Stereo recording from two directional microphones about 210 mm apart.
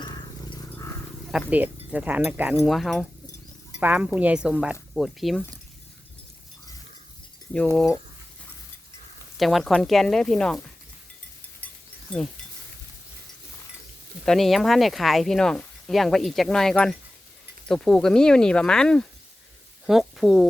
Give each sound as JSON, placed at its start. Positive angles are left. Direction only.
{"t": 0.0, "sound": "a sound", "side_deg": 20}
{"t": 1.3, "sound": "speech", "side_deg": -5}
{"t": 9.4, "sound": "speech", "side_deg": 0}
{"t": 14.3, "sound": "speech", "side_deg": 0}